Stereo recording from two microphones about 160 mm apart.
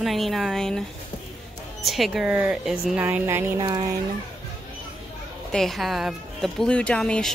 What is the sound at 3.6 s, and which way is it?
Speech, 25° right (ahead or behind).